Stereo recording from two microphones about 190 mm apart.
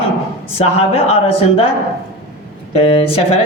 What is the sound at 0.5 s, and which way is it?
Speech, 30° left (ahead or behind).